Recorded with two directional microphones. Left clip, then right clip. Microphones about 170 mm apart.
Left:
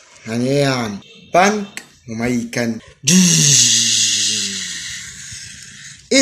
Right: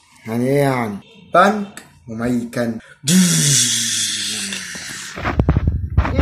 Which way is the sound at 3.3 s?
65° left (ahead or behind).